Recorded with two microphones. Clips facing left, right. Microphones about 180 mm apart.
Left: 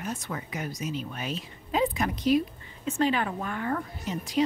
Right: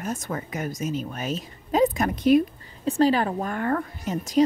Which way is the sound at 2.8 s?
35° right (ahead or behind).